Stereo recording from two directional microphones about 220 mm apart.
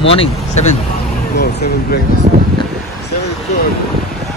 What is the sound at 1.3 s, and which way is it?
Speech, 45° left (ahead or behind).